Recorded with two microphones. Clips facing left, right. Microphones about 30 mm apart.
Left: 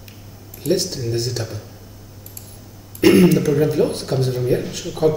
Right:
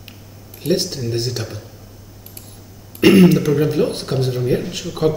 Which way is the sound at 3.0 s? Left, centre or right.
Centre.